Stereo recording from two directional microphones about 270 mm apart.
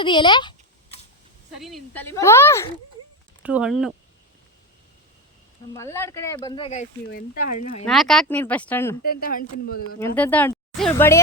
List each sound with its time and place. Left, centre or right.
0.0 s a sound: centre
1.6 s speech: centre
3.4 s speech: centre
5.7 s speech: centre
7.1 s speech: left
7.9 s speech: centre
9.0 s speech: left
10.2 s speech: centre